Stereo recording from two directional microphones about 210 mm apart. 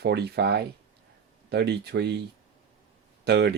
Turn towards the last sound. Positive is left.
turn(degrees=-50)  # may be behind; listen again after turning